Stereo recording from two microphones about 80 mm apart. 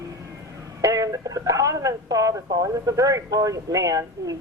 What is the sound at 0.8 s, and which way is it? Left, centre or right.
A woman's voice, right.